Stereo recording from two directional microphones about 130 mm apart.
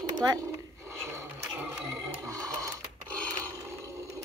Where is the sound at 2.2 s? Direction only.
25° right (ahead or behind).